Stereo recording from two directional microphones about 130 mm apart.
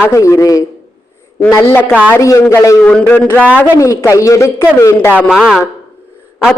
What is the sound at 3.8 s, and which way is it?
A woman's voice, 25° left (ahead or behind).